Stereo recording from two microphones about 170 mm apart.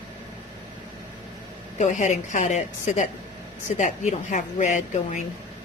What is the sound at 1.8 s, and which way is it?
A woman's voice, 45° left (ahead or behind).